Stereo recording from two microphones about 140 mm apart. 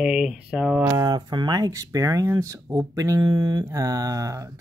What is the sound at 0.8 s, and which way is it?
Speech, 30° right (ahead or behind).